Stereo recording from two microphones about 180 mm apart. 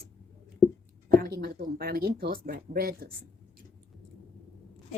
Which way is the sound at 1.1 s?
55° right (ahead or behind).